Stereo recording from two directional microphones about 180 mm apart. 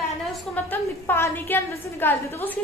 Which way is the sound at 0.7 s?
10° left (ahead or behind).